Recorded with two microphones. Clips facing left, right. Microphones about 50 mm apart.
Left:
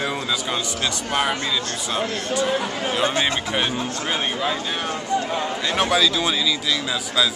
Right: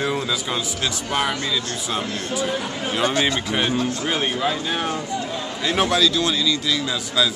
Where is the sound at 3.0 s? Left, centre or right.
Centre.